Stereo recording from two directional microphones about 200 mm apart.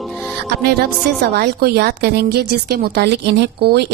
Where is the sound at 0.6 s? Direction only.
55° right (ahead or behind).